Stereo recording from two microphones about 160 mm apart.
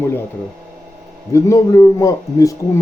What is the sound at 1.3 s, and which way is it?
A man's voice, 20° left (ahead or behind).